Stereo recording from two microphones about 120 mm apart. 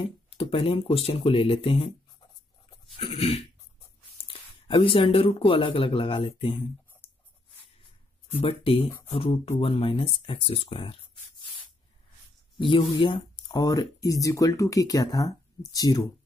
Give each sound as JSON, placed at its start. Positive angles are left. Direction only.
{"t": 0.4, "sound": "speech", "side_deg": 50}
{"t": 3.0, "sound": "cough", "side_deg": 55}
{"t": 4.3, "sound": "speech", "side_deg": 50}
{"t": 8.4, "sound": "speech", "side_deg": 50}
{"t": 12.5, "sound": "speech", "side_deg": 45}
{"t": 13.0, "sound": "a sound", "side_deg": 45}
{"t": 13.6, "sound": "speech", "side_deg": 30}